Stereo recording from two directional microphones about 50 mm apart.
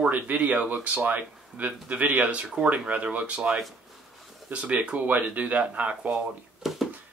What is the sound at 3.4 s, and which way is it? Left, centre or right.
Speech, centre.